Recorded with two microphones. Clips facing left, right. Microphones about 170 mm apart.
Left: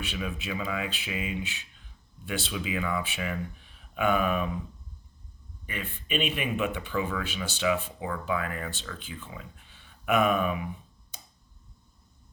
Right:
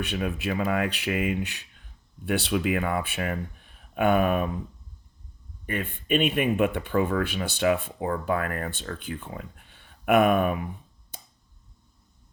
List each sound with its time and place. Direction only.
0.0 s speech: 55° right (ahead or behind)
5.6 s speech: 50° right (ahead or behind)